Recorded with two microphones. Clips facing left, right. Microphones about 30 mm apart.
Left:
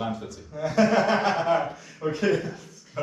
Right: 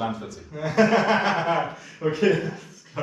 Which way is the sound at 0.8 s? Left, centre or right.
Right.